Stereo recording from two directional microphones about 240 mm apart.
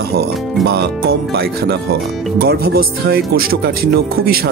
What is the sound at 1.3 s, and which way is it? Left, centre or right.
Speech, right.